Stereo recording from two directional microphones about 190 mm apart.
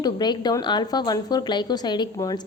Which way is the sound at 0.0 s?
20° left (ahead or behind).